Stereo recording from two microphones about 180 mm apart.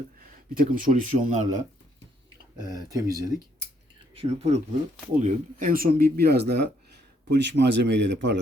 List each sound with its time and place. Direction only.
0.2 s speech: 50° right (ahead or behind)
2.6 s speech: 20° right (ahead or behind)
4.1 s speech: 30° right (ahead or behind)
5.2 s a man's voice: 50° right (ahead or behind); by 8.4 s 75° right (ahead or behind)